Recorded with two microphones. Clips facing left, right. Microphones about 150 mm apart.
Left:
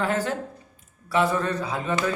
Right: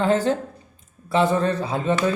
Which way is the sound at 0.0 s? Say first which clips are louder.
Right 6 dB; 25° right (ahead or behind).